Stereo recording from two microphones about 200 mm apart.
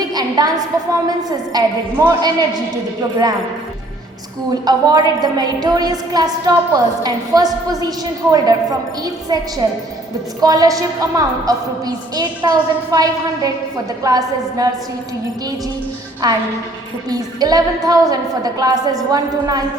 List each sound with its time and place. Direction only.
0.0 s a woman's voice: 20° right (ahead or behind)
4.6 s a woman's voice: 20° right (ahead or behind)
16.2 s a woman's voice: 20° right (ahead or behind)